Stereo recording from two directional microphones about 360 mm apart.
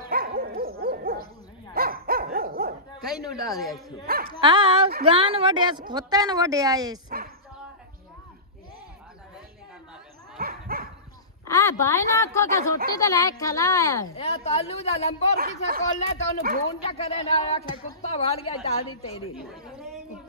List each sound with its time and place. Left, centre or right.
0.0 s dog: right
3.1 s speech: centre
4.0 s speech: right
4.4 s a woman's voice: centre
10.4 s dog: right
11.4 s a woman's voice: centre
15.3 s speech: right
16.8 s speech: centre
19.5 s a sound: centre